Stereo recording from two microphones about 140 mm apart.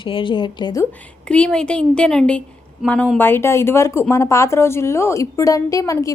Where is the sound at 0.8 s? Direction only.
10° left (ahead or behind).